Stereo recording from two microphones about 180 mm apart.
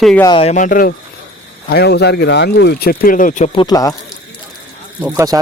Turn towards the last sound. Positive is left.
turn(degrees=-20)  # may be behind; listen again after turning